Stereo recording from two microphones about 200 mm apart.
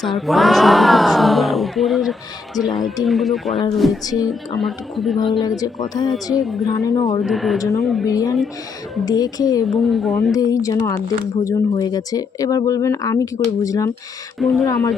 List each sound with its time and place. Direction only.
0.0 s speech: centre (ahead or behind)
4.0 s speech: 20° left (ahead or behind)
4.3 s speech: centre (ahead or behind)
5.4 s speech: 20° left (ahead or behind)
6.4 s speech: centre (ahead or behind)
6.7 s speech: 15° left (ahead or behind)
7.3 s speech: centre (ahead or behind)
8.0 s speech: 15° left (ahead or behind)
9.6 s speech: centre (ahead or behind)
10.3 s speech: 15° left (ahead or behind)
14.3 s speech: centre (ahead or behind)